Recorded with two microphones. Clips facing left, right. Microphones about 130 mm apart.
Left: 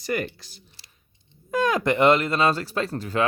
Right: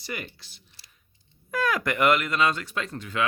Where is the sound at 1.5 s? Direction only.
25° left (ahead or behind).